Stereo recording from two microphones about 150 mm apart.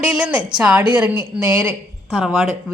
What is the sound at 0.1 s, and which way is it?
A woman's voice, 5° right (ahead or behind).